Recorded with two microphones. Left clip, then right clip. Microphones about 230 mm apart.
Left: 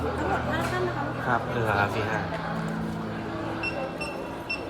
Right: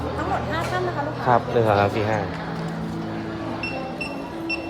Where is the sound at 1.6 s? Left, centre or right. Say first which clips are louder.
Right 3 dB; right.